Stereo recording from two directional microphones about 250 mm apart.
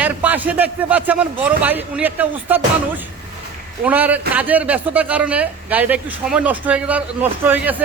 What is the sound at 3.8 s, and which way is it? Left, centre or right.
A man's voice, centre.